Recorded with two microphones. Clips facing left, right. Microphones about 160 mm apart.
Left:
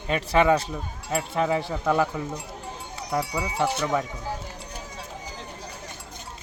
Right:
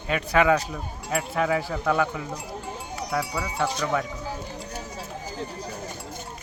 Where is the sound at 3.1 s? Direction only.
15° left (ahead or behind).